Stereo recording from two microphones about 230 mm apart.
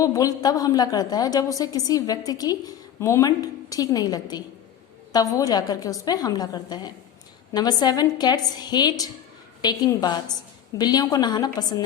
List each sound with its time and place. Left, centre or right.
0.0 s a woman's voice: centre